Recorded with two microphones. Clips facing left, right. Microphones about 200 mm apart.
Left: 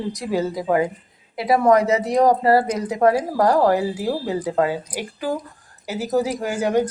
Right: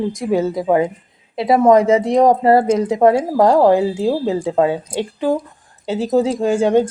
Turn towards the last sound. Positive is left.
turn(degrees=-25)  # may be behind; listen again after turning